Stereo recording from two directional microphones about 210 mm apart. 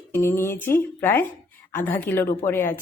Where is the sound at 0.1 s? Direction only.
10° left (ahead or behind).